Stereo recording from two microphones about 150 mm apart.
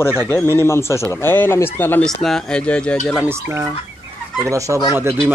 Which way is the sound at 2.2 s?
5° left (ahead or behind).